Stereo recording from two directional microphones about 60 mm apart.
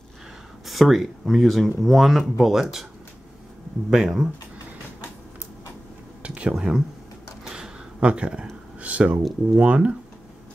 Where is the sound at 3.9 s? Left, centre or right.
Centre.